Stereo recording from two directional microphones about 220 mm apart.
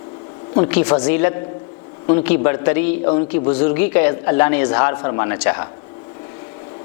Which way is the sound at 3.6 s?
10° left (ahead or behind).